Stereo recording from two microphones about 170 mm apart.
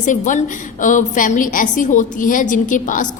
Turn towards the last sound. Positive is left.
turn(degrees=50)  # may be behind; listen again after turning